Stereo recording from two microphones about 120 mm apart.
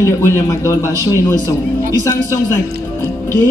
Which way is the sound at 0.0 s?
25° left (ahead or behind).